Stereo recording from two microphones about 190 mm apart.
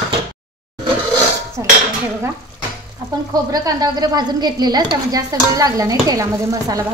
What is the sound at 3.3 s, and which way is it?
A woman's voice, 20° right (ahead or behind).